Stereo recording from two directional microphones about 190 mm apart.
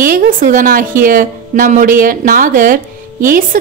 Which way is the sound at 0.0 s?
45° right (ahead or behind).